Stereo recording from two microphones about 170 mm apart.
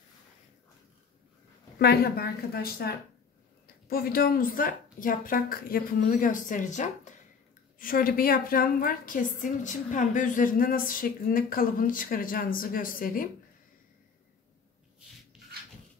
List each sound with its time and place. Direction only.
1.8 s a woman's voice: 65° left (ahead or behind)